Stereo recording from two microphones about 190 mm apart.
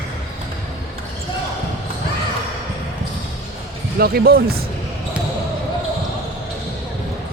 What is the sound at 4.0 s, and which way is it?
Speech, 55° right (ahead or behind).